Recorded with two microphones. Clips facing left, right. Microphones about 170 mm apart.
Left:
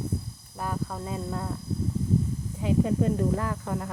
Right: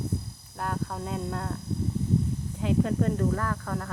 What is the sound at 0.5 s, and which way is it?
Speech, centre (ahead or behind).